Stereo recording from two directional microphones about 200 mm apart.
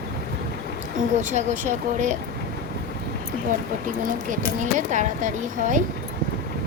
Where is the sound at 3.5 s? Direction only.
40° right (ahead or behind).